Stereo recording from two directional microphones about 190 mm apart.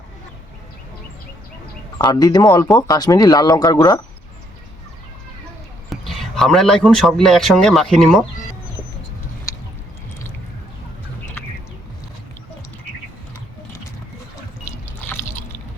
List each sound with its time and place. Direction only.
2.0 s speech: 20° left (ahead or behind)
5.9 s speech: centre (ahead or behind)
9.5 s a sound: 20° left (ahead or behind)